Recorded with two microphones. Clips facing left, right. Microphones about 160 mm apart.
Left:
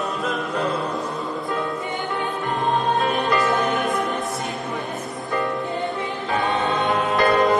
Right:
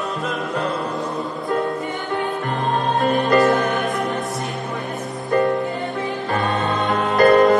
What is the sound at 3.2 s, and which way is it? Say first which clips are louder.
Music: right 5 dB; 45° right (ahead or behind).